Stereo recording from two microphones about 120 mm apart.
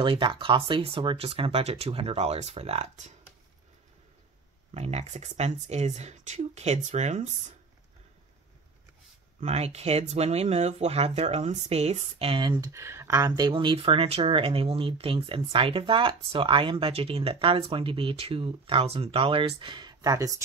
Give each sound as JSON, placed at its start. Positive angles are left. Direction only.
{"t": 0.0, "sound": "speech", "side_deg": -45}
{"t": 4.7, "sound": "speech", "side_deg": -65}
{"t": 9.4, "sound": "speech", "side_deg": -65}
{"t": 12.2, "sound": "speech", "side_deg": -45}
{"t": 12.7, "sound": "speech", "side_deg": -25}
{"t": 13.4, "sound": "speech", "side_deg": -40}